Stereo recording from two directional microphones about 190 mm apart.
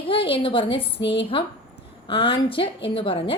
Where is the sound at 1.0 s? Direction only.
65° left (ahead or behind).